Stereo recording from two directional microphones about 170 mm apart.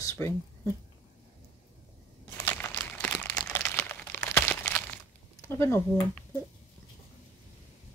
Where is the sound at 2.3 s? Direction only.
15° left (ahead or behind).